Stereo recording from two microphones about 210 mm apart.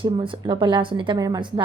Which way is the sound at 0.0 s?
25° right (ahead or behind).